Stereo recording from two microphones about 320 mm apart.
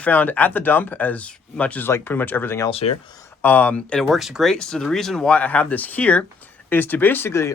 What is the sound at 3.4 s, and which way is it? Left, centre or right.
Speech, centre.